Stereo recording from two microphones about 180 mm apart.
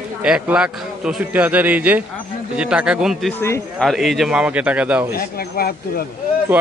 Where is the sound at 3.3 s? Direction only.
15° left (ahead or behind).